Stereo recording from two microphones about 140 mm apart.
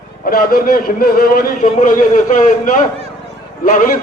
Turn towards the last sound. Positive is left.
turn(degrees=75)  # may be behind; listen again after turning